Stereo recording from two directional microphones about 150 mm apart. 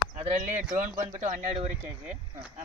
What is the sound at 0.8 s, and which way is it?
Speech, 45° right (ahead or behind).